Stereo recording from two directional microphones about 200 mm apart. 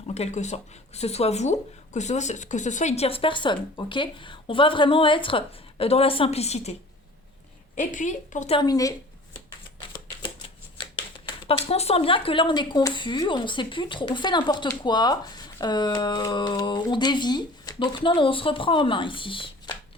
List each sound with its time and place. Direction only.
0.1 s speech: 35° left (ahead or behind)
7.8 s speech: 40° left (ahead or behind)
8.5 s a woman's voice: 20° left (ahead or behind)
11.4 s speech: 30° left (ahead or behind)